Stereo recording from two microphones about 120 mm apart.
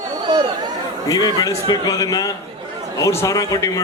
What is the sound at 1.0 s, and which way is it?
A man's voice, 30° left (ahead or behind).